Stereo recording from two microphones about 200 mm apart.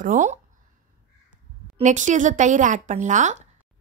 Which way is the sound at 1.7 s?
35° right (ahead or behind).